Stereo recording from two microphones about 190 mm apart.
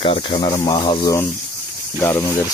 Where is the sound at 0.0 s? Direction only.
30° left (ahead or behind).